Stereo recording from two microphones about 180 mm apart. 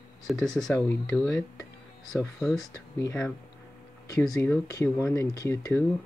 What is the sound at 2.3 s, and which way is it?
Speech, centre (ahead or behind).